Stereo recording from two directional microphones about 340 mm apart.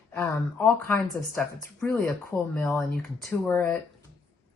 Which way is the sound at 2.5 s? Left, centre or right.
Centre.